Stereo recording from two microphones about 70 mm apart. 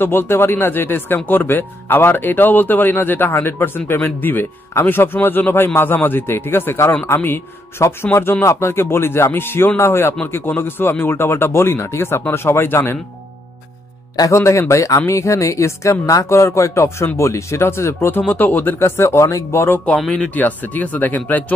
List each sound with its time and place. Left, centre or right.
0.0 s speech: left
14.3 s speech: left
18.2 s speech: left
20.3 s speech: left